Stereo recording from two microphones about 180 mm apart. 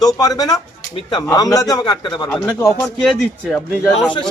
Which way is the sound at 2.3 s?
10° left (ahead or behind).